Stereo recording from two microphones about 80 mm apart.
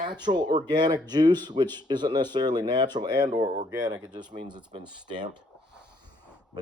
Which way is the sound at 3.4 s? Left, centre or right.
Right.